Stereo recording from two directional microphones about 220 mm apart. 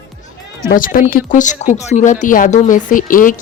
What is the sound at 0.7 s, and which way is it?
Speech, 40° left (ahead or behind).